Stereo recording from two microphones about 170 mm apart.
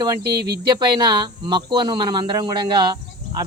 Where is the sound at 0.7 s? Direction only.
25° right (ahead or behind).